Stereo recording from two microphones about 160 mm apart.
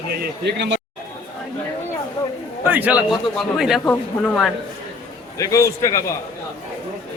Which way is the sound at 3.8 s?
10° left (ahead or behind).